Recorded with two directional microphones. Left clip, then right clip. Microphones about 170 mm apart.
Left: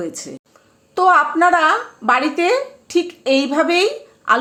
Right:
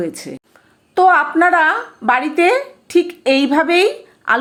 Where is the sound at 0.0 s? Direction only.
10° right (ahead or behind).